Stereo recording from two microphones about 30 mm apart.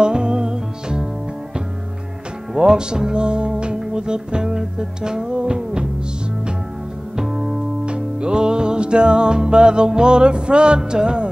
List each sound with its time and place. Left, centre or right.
0.0 s music: right
2.5 s music: right
7.2 s music: centre
7.8 s music: right